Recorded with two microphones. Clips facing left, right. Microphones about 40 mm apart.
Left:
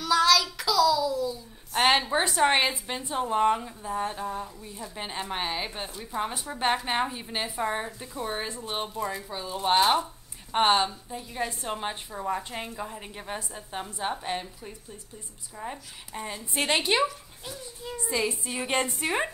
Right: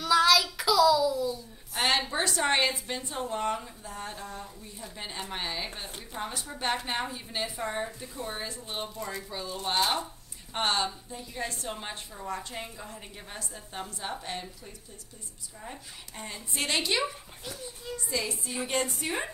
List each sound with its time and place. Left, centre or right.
0.0 s a sound: centre
1.8 s a woman's voice: centre
16.5 s a woman's voice: left
18.1 s a woman's voice: left